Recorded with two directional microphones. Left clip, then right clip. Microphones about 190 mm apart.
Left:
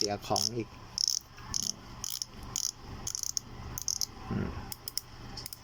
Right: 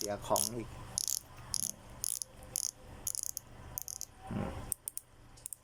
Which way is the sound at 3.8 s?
25° right (ahead or behind).